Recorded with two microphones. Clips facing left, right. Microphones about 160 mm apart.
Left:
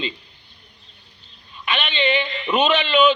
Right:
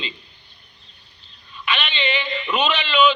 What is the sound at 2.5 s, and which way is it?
Speech, 50° left (ahead or behind).